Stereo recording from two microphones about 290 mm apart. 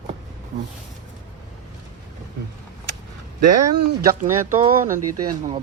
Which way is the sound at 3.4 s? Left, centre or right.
Right.